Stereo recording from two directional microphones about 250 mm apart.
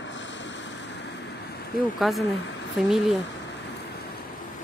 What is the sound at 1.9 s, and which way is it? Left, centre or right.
Speech, centre.